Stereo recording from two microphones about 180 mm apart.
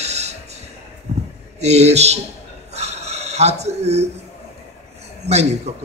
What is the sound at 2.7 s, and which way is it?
Filing, 35° right (ahead or behind).